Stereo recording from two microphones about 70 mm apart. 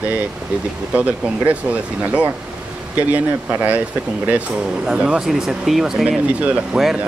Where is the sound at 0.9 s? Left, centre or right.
Centre.